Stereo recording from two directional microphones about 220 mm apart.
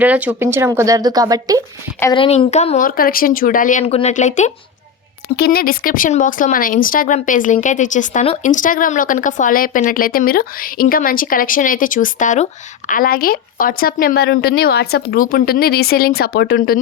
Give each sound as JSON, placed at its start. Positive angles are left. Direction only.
{"t": 0.0, "sound": "a woman's voice", "side_deg": -5}
{"t": 2.0, "sound": "speech", "side_deg": 20}
{"t": 5.4, "sound": "speech", "side_deg": 45}